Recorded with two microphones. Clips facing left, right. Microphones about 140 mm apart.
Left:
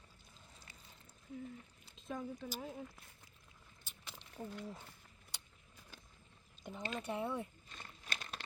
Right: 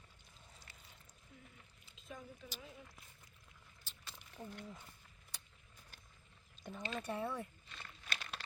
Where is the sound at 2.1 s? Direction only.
90° left.